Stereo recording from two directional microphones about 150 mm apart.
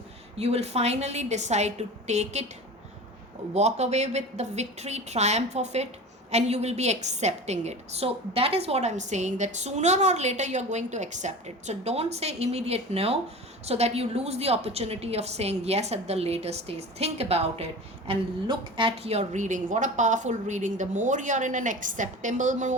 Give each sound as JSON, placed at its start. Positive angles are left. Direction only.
{"t": 0.3, "sound": "a woman's voice", "side_deg": -45}
{"t": 3.5, "sound": "a woman's voice", "side_deg": -45}